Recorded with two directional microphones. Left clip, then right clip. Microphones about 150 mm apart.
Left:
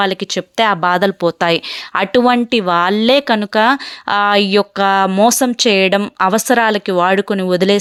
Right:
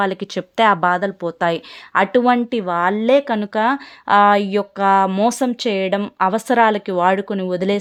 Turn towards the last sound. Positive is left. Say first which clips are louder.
# left 6 dB
turn(degrees=25)  # may be behind; listen again after turning